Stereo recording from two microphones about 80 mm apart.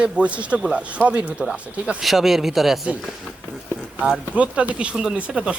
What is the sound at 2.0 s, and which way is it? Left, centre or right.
Speech, centre.